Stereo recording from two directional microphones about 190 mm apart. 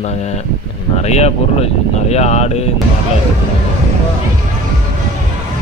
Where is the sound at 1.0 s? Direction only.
35° left (ahead or behind).